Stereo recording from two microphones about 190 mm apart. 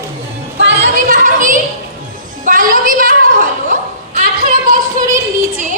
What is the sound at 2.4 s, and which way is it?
Music, 45° right (ahead or behind).